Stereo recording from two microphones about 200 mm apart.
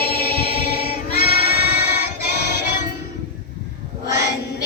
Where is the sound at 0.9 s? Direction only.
50° left (ahead or behind).